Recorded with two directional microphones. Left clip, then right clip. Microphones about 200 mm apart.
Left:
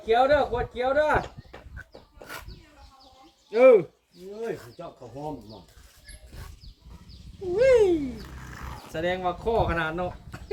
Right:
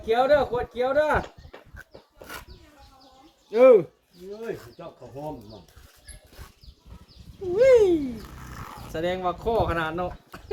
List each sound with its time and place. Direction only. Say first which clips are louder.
0.0 s speech: even; 30° right (ahead or behind)
1.7 s pig: even; 25° right (ahead or behind)
3.5 s speech: right 1 dB; 25° right (ahead or behind)
7.5 s speech: right 2 dB; 25° right (ahead or behind)